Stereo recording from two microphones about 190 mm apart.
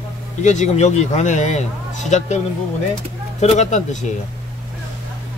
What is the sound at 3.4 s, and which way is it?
Speech, 40° left (ahead or behind).